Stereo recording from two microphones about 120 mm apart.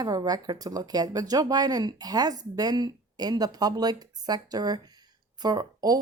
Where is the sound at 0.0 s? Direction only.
30° right (ahead or behind).